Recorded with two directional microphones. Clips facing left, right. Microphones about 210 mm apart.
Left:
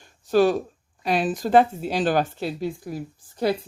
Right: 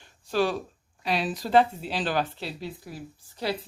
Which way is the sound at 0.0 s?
45° left (ahead or behind).